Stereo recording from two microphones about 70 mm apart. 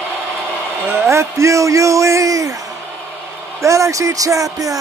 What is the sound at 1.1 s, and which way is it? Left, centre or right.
Speech, right.